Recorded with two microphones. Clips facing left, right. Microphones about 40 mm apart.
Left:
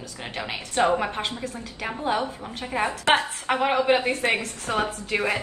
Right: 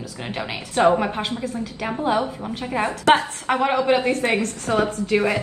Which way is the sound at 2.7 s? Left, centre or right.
Centre.